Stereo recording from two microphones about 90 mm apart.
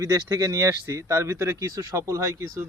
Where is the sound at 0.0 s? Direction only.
40° right (ahead or behind).